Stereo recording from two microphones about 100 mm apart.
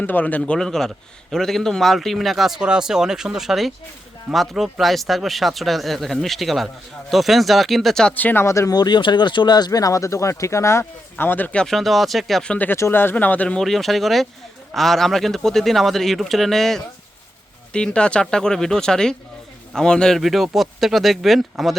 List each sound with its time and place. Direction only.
0.0 s a man's voice: 20° left (ahead or behind)
8.1 s speech: 20° left (ahead or behind)
11.6 s a man's voice: centre (ahead or behind)
12.7 s speech: 25° left (ahead or behind)
13.6 s a man's voice: centre (ahead or behind)